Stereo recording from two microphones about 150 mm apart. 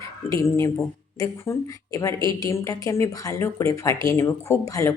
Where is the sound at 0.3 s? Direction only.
20° left (ahead or behind).